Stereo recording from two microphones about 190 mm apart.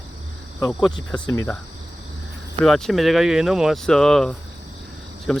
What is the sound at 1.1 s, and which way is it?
Speech, 15° left (ahead or behind).